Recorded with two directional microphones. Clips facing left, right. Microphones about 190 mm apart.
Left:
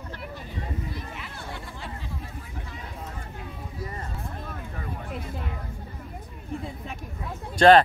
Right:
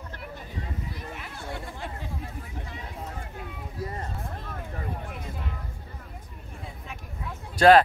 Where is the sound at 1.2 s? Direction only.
50° right (ahead or behind).